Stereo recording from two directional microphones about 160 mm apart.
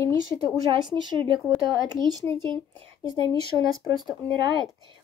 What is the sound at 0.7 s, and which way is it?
Speech, 25° right (ahead or behind).